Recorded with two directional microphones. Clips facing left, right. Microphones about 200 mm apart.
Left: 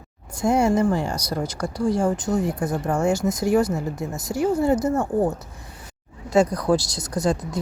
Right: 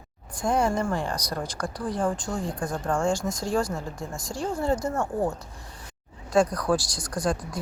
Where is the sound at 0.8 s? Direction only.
5° left (ahead or behind).